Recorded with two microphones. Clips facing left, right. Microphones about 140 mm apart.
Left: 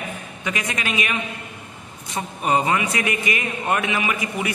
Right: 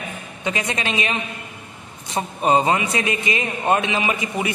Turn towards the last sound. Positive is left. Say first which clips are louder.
# right 2 dB
turn(degrees=-25)  # may be behind; listen again after turning